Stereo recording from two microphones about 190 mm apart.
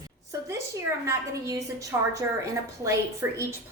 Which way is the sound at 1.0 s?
15° right (ahead or behind).